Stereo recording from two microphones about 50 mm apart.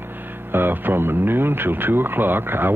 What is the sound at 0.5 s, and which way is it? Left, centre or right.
Speech, right.